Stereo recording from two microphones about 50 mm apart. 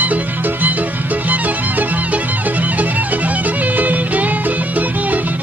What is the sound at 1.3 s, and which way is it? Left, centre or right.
Music, right.